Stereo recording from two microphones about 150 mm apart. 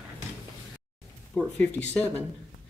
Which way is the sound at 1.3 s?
5° left (ahead or behind).